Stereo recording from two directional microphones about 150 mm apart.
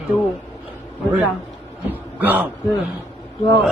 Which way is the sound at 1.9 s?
10° right (ahead or behind).